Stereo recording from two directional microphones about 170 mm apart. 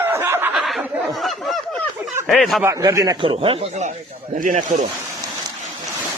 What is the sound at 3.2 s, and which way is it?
A man's voice, 35° right (ahead or behind).